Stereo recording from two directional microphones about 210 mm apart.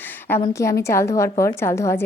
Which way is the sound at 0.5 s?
15° left (ahead or behind).